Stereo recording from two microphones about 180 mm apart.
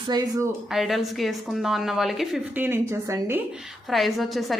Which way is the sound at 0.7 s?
Centre (ahead or behind).